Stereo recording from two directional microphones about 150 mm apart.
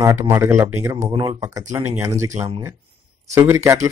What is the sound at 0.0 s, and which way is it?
Speech, 20° right (ahead or behind).